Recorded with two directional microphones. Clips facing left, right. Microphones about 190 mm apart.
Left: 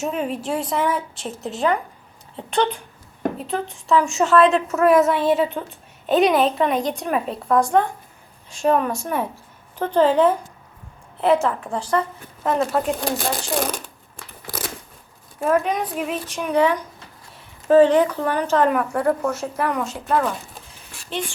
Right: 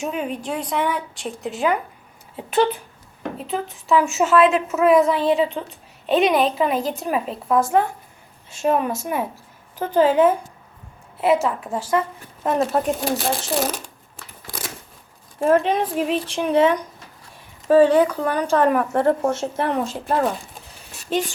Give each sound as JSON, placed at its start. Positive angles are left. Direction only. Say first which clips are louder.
{"t": 0.0, "sound": "a woman's voice", "louder": "left 1 dB", "side_deg": 0}
{"t": 14.4, "sound": "a sound", "louder": "left 3 dB", "side_deg": 0}
{"t": 15.4, "sound": "speech", "louder": "right 3 dB", "side_deg": -30}
{"t": 17.7, "sound": "a woman's voice", "louder": "even", "side_deg": -10}
{"t": 18.9, "sound": "speech", "louder": "right 2 dB", "side_deg": -25}